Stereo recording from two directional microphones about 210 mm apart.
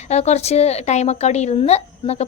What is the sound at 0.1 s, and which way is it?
A woman's voice, 30° left (ahead or behind).